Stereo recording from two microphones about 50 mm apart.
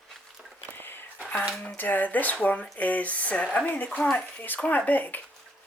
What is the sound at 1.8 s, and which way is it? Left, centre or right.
Speech, left.